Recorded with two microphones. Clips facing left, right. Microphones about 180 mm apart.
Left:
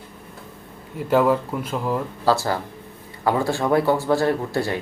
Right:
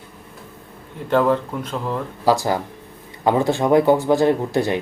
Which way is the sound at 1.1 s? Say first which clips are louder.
Even; 10° left (ahead or behind).